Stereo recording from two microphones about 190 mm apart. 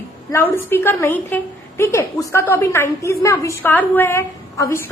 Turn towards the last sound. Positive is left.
turn(degrees=15)  # may be behind; listen again after turning